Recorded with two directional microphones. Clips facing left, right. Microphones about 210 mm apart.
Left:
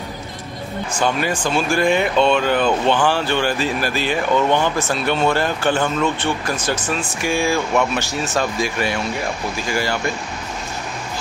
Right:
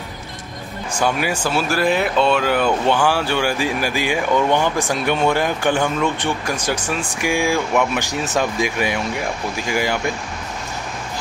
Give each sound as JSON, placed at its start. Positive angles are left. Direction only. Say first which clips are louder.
{"t": 0.9, "sound": "speech", "louder": "even", "side_deg": -10}